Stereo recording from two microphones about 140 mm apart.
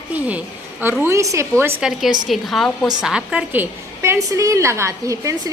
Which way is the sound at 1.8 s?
5° right (ahead or behind).